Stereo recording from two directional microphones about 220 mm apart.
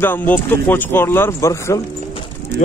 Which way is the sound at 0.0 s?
10° left (ahead or behind).